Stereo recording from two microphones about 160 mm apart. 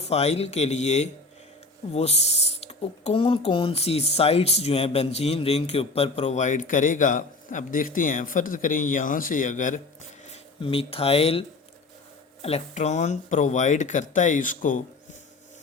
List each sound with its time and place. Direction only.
0.0 s speech: 40° left (ahead or behind)